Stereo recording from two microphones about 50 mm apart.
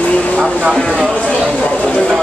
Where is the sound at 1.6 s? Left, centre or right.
Left.